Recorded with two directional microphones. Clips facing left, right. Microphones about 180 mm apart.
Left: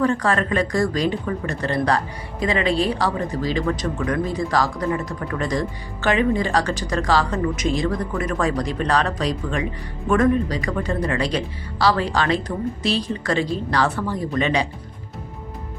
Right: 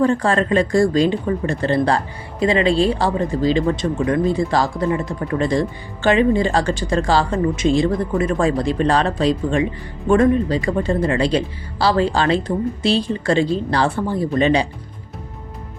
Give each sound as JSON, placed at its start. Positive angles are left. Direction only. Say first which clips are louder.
{"t": 0.0, "sound": "speech", "louder": "right 3 dB", "side_deg": -30}